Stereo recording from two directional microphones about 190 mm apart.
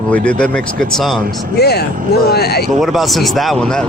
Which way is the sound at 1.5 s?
60° left (ahead or behind).